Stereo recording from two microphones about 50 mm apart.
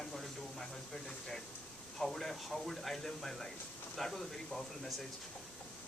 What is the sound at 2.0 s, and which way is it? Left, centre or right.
Speech, centre.